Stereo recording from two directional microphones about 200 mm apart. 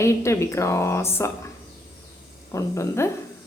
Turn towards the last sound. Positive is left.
turn(degrees=15)  # may be behind; listen again after turning